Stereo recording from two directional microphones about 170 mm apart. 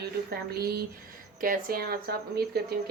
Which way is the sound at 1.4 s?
60° right (ahead or behind).